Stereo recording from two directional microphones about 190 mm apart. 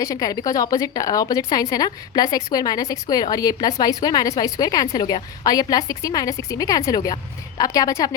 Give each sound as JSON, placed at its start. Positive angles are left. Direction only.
{"t": 0.0, "sound": "a woman's voice", "side_deg": 20}